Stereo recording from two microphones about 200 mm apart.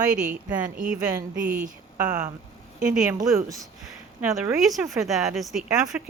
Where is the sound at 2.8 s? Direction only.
5° right (ahead or behind).